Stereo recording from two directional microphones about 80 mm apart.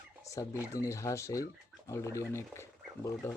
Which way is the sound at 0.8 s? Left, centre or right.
Left.